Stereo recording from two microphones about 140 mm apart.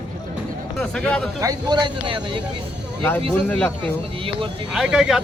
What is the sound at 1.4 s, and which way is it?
Speech, 30° right (ahead or behind).